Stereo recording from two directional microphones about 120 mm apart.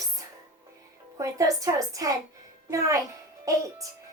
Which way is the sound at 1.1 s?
25° right (ahead or behind).